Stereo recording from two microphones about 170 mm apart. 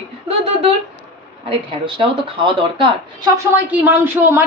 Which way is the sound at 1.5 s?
30° right (ahead or behind).